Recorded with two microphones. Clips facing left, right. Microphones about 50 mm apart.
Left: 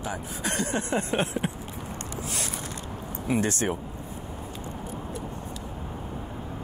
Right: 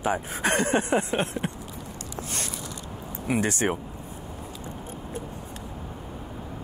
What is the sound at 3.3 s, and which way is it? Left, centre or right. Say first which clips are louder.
Speech: right 1 dB; centre.